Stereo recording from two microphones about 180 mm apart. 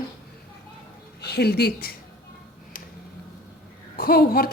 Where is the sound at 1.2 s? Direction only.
65° left (ahead or behind).